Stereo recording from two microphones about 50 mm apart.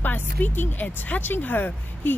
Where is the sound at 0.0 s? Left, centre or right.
Left.